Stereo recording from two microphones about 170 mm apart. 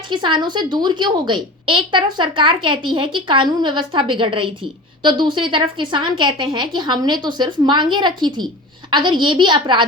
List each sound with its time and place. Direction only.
0.1 s a woman's voice: 25° right (ahead or behind)